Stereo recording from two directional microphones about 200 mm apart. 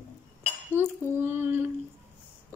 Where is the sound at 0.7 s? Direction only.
10° right (ahead or behind).